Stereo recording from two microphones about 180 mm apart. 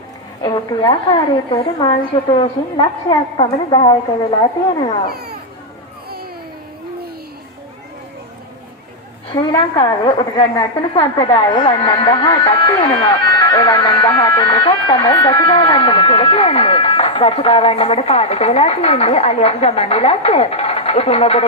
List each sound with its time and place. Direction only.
0.4 s a woman's voice: 25° left (ahead or behind)
5.1 s speech: 60° right (ahead or behind)
9.3 s a woman's voice: 25° left (ahead or behind)